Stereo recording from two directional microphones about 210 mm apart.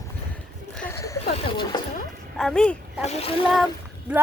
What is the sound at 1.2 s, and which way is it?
Speech, 25° left (ahead or behind).